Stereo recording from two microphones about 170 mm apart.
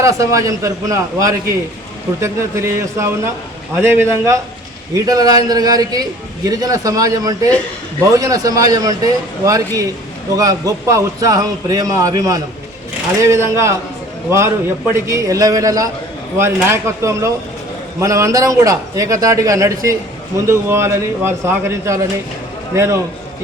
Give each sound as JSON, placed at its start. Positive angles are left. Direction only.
{"t": 0.0, "sound": "a man's voice", "side_deg": -20}